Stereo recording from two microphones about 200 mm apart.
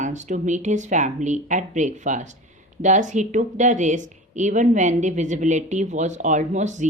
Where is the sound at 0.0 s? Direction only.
35° right (ahead or behind).